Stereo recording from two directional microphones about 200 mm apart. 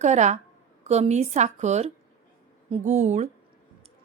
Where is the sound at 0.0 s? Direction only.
35° right (ahead or behind).